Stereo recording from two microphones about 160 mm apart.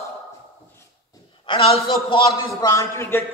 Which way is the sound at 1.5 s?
40° left (ahead or behind).